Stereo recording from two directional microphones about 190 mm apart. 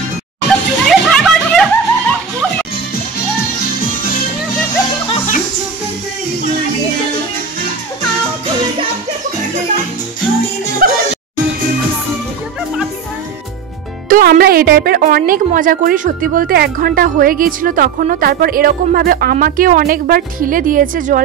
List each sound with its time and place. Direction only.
0.5 s music: 5° left (ahead or behind)
10.8 s music: 50° right (ahead or behind)
14.0 s speech: 45° right (ahead or behind)